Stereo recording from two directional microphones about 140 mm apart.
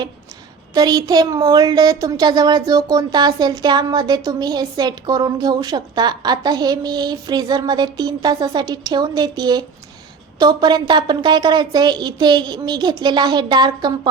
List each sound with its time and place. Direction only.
0.7 s a woman's voice: 30° right (ahead or behind)